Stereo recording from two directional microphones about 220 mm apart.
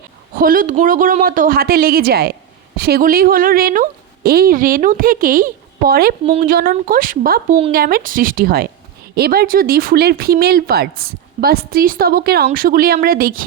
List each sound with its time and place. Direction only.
0.3 s a woman's voice: 40° right (ahead or behind)